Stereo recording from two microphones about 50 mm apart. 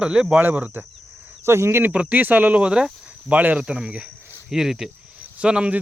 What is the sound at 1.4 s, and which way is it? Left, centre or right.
Speech, right.